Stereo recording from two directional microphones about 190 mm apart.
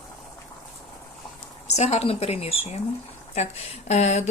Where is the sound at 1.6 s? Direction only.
35° left (ahead or behind).